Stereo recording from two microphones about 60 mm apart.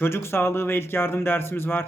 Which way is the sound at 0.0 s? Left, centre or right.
Left.